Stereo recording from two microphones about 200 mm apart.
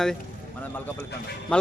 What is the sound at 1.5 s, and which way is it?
Speech, 5° left (ahead or behind).